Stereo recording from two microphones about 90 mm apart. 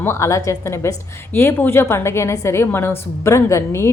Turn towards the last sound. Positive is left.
turn(degrees=35)  # may be behind; listen again after turning